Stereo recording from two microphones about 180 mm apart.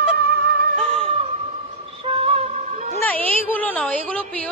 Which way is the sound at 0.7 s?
5° left (ahead or behind).